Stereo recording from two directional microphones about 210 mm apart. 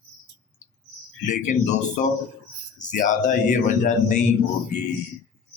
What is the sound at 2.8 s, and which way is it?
Speech, 35° left (ahead or behind).